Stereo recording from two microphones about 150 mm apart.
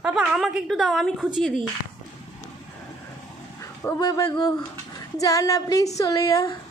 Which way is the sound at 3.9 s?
25° left (ahead or behind).